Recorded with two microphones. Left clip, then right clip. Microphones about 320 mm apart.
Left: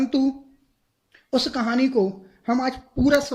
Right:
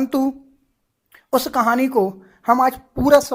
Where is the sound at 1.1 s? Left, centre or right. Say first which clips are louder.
Right 6 dB; centre.